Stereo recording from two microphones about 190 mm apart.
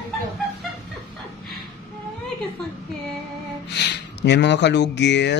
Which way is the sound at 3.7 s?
65° left (ahead or behind).